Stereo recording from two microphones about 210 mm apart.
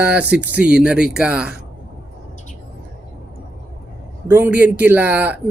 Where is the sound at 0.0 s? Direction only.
5° right (ahead or behind).